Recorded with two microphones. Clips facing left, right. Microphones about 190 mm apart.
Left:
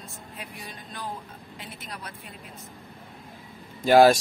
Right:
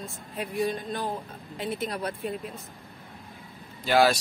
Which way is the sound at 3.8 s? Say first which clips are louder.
Left 6 dB; 45° left (ahead or behind).